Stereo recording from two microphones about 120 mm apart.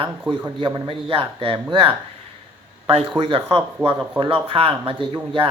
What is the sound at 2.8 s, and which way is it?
Speech, 50° right (ahead or behind).